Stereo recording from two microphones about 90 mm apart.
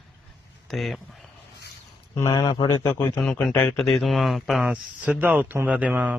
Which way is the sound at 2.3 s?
50° left (ahead or behind).